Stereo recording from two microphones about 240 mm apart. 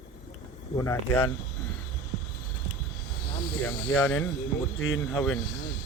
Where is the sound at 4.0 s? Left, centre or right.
Left.